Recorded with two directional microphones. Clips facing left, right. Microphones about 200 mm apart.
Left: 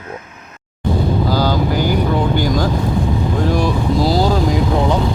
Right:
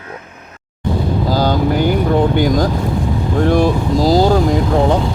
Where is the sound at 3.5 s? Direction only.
55° right (ahead or behind).